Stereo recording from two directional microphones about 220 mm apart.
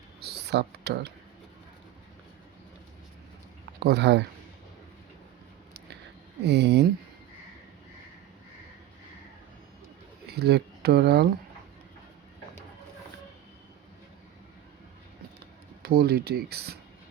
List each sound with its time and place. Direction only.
0.2 s speech: 50° right (ahead or behind)
3.8 s speech: 50° right (ahead or behind)
6.4 s speech: 50° right (ahead or behind)
10.2 s speech: 45° right (ahead or behind)
15.8 s speech: 40° right (ahead or behind)